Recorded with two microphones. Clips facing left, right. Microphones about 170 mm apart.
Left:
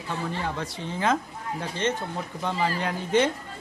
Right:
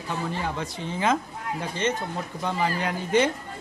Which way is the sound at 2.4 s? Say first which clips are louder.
Even; 5° right (ahead or behind).